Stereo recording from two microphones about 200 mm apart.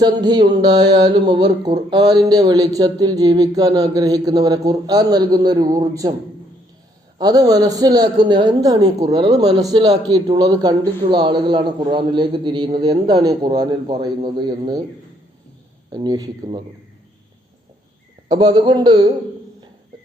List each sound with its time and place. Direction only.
0.0 s speech: 20° right (ahead or behind)
7.2 s speech: 20° right (ahead or behind)
15.9 s speech: 20° right (ahead or behind)
18.3 s speech: 20° right (ahead or behind)